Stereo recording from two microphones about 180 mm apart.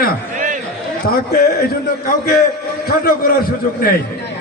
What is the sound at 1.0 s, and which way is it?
Speech, 55° left (ahead or behind).